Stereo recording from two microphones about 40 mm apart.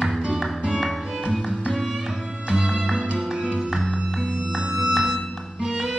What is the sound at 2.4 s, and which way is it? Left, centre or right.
Music, centre.